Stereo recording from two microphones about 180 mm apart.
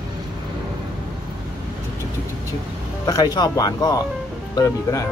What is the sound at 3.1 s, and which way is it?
Speech, 20° left (ahead or behind).